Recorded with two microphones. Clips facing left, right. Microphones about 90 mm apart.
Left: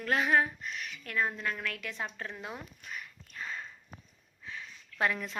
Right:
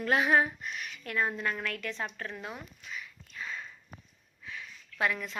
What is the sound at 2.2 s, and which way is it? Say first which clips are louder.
Speech: right 1 dB; 15° left (ahead or behind).